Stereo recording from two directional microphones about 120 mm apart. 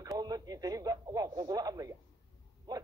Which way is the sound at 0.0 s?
30° right (ahead or behind).